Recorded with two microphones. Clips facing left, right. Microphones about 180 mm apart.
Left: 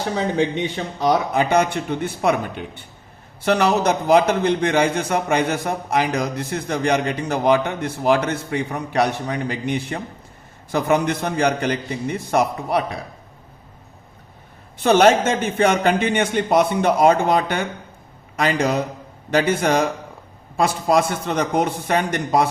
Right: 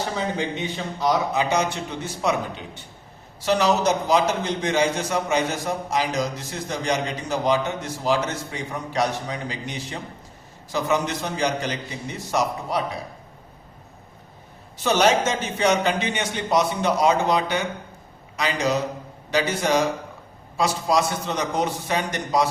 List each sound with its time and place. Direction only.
1.0 s a man's voice: 55° left (ahead or behind)
14.8 s a man's voice: 55° left (ahead or behind)